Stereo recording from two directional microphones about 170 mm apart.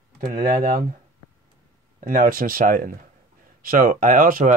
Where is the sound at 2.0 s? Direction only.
55° right (ahead or behind).